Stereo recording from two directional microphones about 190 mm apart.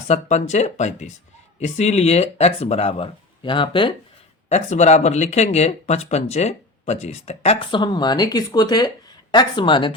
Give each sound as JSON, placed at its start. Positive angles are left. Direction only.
{"t": 0.1, "sound": "speech", "side_deg": 35}
{"t": 4.4, "sound": "speech", "side_deg": 35}